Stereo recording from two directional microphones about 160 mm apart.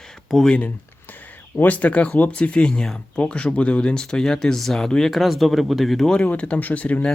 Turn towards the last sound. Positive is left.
turn(degrees=10)  # may be behind; listen again after turning